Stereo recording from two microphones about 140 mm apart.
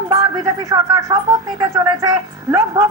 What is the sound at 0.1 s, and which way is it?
A woman's voice, 25° right (ahead or behind).